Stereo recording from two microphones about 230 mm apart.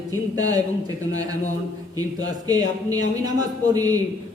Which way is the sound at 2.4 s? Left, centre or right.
Centre.